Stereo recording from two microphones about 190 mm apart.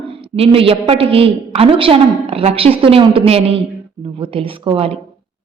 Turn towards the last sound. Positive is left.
turn(degrees=-30)  # may be behind; listen again after turning